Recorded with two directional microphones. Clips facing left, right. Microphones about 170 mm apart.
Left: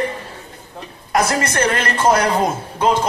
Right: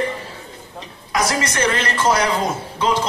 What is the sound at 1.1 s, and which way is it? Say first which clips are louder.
A woman's voice: left 3 dB; 55° left (ahead or behind).